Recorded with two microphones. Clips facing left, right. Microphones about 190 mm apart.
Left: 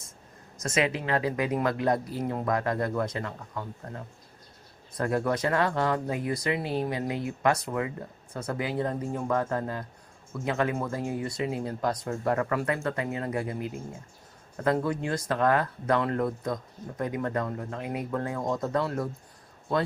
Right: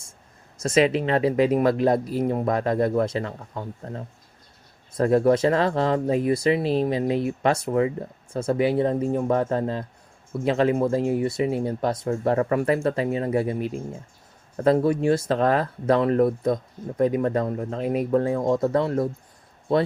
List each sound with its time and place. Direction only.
0.6 s speech: 25° right (ahead or behind)